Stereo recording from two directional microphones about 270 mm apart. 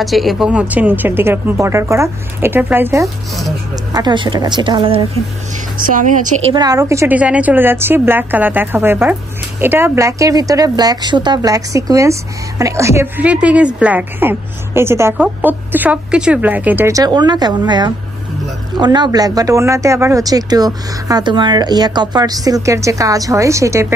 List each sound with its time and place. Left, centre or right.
0.0 s a woman's voice: centre
5.8 s a woman's voice: right
6.5 s a woman's voice: centre